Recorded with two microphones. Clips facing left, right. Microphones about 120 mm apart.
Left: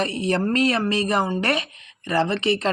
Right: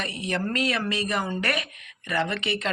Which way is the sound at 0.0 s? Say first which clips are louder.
Left 7 dB; 35° left (ahead or behind).